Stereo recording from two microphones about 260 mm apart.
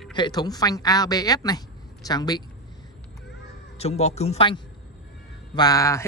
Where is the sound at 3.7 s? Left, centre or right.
Left.